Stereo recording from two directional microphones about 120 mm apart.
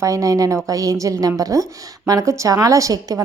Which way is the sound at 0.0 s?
25° right (ahead or behind).